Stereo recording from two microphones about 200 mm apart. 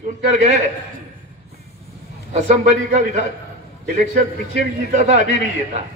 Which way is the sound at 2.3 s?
35° right (ahead or behind).